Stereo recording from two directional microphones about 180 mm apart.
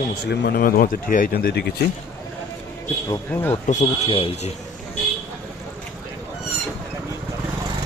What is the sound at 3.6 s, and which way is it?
Speech, 40° left (ahead or behind).